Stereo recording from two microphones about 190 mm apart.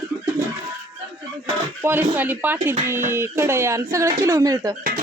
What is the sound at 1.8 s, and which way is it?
Speech, 10° right (ahead or behind).